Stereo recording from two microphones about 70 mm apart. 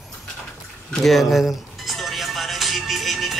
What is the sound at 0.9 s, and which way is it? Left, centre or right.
Speech, centre.